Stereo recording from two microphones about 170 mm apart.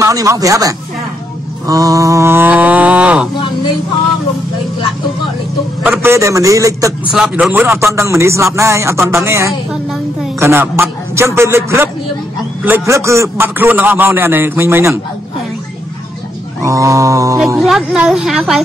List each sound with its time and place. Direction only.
0.0 s a man's voice: 20° right (ahead or behind)
1.7 s cattle: 20° right (ahead or behind)
5.9 s a man's voice: 15° right (ahead or behind)
7.1 s a man's voice: 5° right (ahead or behind)
16.6 s a man's voice: 20° right (ahead or behind)
17.6 s speech: centre (ahead or behind)